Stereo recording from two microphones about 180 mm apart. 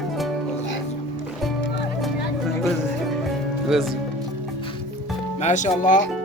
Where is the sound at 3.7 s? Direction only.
Centre (ahead or behind).